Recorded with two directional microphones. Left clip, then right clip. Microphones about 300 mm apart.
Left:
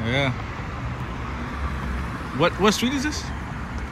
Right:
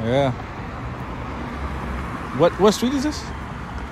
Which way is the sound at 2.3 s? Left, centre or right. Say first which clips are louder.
Right 4 dB; centre.